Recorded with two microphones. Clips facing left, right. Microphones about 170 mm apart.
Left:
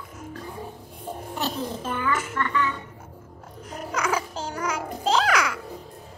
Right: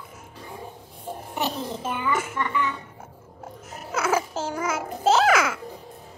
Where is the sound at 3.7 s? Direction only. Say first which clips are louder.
Right 2 dB; 5° right (ahead or behind).